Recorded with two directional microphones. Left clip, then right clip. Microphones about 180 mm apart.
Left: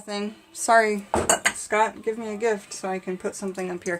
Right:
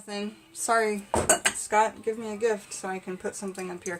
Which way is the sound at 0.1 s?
35° left (ahead or behind).